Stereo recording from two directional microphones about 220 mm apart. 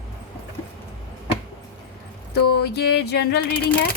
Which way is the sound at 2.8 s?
50° left (ahead or behind).